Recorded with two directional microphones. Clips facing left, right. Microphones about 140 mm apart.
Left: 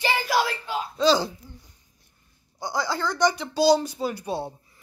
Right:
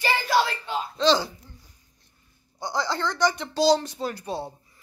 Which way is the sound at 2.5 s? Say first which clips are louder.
Even; 5° left (ahead or behind).